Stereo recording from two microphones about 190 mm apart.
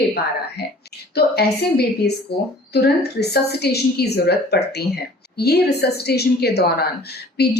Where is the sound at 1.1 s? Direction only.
60° left (ahead or behind).